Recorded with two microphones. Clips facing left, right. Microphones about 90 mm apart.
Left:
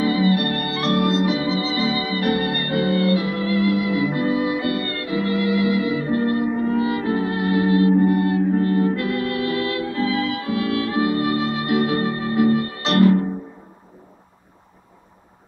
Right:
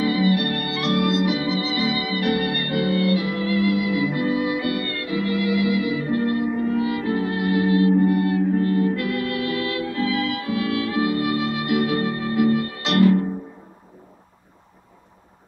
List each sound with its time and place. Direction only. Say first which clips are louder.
0.0 s music: left 1 dB; 35° left (ahead or behind)